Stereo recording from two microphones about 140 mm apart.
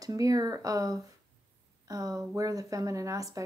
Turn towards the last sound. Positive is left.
turn(degrees=-25)  # may be behind; listen again after turning